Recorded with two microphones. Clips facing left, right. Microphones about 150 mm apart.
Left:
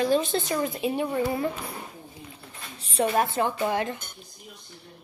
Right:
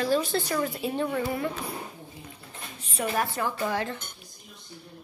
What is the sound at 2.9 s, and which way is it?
Speech, 25° left (ahead or behind).